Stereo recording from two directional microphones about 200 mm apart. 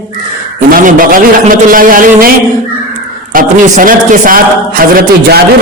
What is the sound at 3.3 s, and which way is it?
A man's voice, 45° right (ahead or behind).